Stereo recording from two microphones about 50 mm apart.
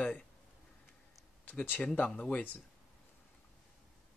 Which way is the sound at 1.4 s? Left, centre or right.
Left.